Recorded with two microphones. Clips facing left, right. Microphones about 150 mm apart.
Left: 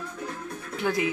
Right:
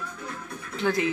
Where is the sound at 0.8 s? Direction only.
10° left (ahead or behind).